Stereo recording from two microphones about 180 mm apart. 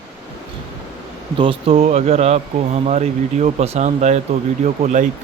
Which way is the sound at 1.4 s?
30° right (ahead or behind).